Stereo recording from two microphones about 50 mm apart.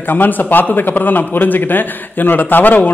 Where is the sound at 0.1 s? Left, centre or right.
Left.